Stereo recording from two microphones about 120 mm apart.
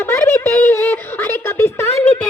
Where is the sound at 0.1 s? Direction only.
15° left (ahead or behind).